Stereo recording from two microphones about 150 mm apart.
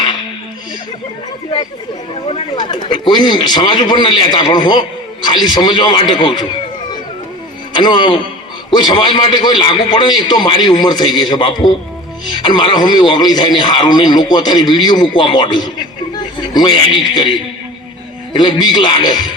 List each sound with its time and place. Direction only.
2.3 s a man's voice: 30° left (ahead or behind)
7.7 s a man's voice: 30° left (ahead or behind)